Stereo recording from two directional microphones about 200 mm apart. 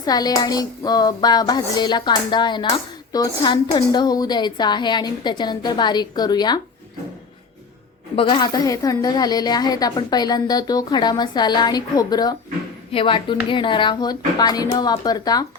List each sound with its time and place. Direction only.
0.0 s a woman's voice: 20° left (ahead or behind)
8.1 s a woman's voice: 25° left (ahead or behind)